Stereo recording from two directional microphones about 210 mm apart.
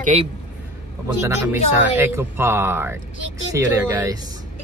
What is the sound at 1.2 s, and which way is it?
Speech, 15° right (ahead or behind).